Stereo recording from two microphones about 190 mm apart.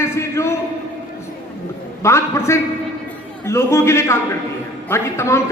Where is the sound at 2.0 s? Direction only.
15° left (ahead or behind).